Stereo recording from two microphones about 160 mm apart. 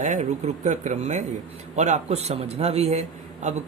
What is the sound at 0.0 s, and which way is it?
A man's voice, 50° right (ahead or behind).